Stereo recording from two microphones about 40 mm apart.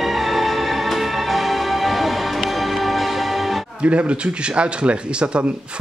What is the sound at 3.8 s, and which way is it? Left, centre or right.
Speech, right.